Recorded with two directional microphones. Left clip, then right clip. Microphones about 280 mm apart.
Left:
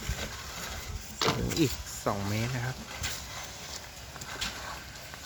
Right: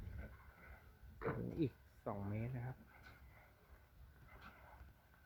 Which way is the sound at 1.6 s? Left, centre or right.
Centre.